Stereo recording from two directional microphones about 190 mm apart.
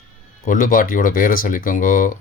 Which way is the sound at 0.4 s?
45° left (ahead or behind).